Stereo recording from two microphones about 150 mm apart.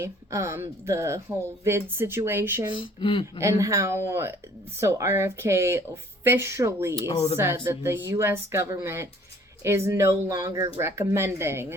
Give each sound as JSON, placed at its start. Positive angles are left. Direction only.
{"t": 0.0, "sound": "speech", "side_deg": -20}
{"t": 2.6, "sound": "speech", "side_deg": 35}
{"t": 3.4, "sound": "speech", "side_deg": -20}